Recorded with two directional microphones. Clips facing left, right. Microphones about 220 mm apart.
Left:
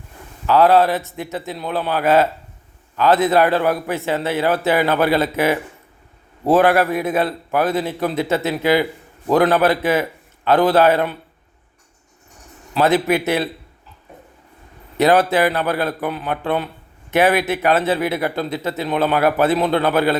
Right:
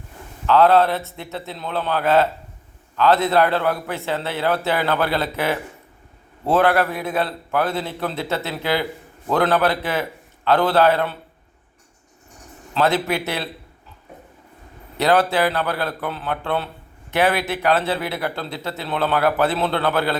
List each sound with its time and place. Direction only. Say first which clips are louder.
0.4 s a man's voice: left 1 dB; 15° left (ahead or behind)
12.7 s speech: left 4 dB; 20° left (ahead or behind)
14.9 s speech: left 3 dB; 20° left (ahead or behind)